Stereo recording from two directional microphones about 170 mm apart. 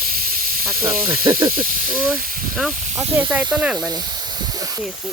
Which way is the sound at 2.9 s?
10° right (ahead or behind).